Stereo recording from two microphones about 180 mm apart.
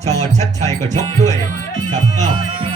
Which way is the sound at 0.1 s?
40° right (ahead or behind).